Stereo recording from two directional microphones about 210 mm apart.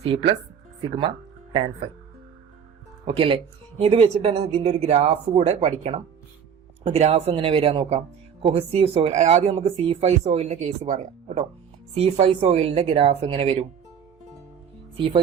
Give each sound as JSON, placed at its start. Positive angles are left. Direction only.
{"t": 0.0, "sound": "speech", "side_deg": -25}
{"t": 1.5, "sound": "speech", "side_deg": -20}
{"t": 3.1, "sound": "speech", "side_deg": -25}
{"t": 14.9, "sound": "speech", "side_deg": -25}